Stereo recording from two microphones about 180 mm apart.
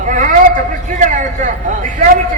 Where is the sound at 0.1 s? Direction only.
45° right (ahead or behind).